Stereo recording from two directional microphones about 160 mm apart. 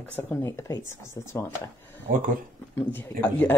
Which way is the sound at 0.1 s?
10° left (ahead or behind).